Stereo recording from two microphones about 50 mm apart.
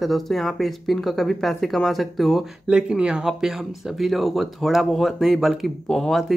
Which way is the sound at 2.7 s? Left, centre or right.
Centre.